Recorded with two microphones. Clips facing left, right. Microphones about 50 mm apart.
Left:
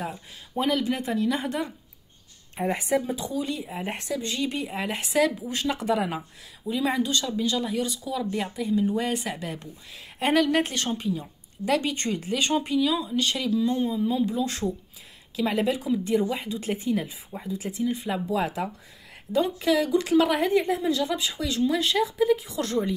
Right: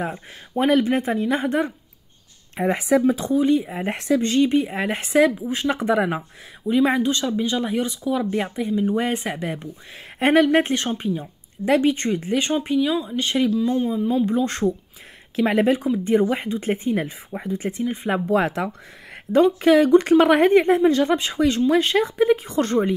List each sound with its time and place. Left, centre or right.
0.0 s speech: right
2.5 s speech: right
3.3 s speech: right
3.6 s speech: right
4.4 s speech: right
5.2 s speech: right
11.9 s speech: centre
12.2 s a woman's voice: right
15.9 s speech: right
18.3 s a woman's voice: right